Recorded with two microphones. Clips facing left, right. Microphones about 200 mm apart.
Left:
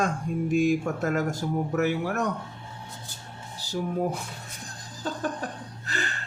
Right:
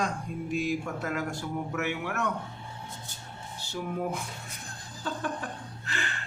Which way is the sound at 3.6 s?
35° left (ahead or behind).